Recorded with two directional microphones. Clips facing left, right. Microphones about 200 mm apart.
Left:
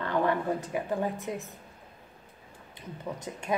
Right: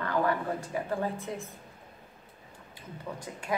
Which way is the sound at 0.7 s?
15° left (ahead or behind).